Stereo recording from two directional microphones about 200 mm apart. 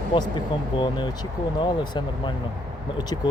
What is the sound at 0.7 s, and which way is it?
Speech, 25° left (ahead or behind).